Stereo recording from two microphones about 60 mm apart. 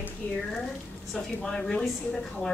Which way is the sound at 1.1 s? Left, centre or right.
Centre.